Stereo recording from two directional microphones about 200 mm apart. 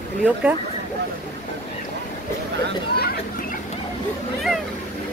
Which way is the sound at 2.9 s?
50° left (ahead or behind).